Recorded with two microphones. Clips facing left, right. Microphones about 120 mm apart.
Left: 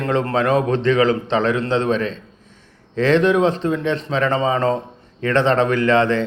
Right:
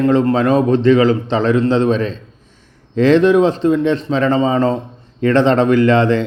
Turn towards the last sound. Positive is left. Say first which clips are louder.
# right 4 dB
turn(degrees=-30)  # may be behind; listen again after turning